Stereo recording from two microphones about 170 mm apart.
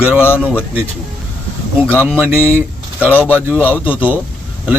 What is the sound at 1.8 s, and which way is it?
Speech, 10° left (ahead or behind).